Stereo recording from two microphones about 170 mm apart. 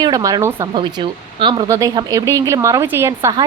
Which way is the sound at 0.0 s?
20° right (ahead or behind).